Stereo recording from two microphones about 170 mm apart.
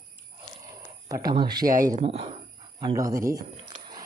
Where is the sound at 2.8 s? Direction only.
25° right (ahead or behind).